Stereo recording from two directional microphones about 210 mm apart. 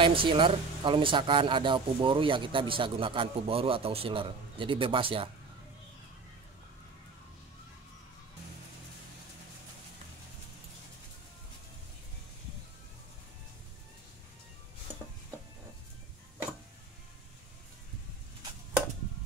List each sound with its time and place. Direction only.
0.0 s speech: 25° right (ahead or behind)